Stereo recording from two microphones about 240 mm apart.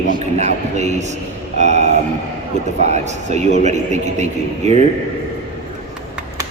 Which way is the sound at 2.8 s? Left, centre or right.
Right.